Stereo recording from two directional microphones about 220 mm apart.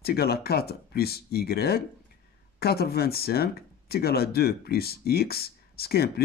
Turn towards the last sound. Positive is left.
turn(degrees=45)  # may be behind; listen again after turning